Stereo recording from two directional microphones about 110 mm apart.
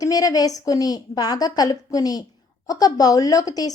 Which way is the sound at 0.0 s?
35° left (ahead or behind).